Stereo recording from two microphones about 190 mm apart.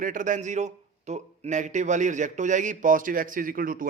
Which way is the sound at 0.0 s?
45° right (ahead or behind).